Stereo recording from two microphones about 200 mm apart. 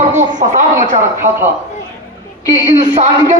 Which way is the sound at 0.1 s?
40° right (ahead or behind).